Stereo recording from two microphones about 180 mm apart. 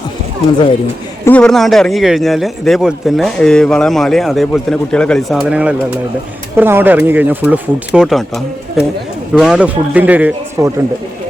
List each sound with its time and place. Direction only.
1.2 s speech: 5° left (ahead or behind); by 10.7 s 15° right (ahead or behind)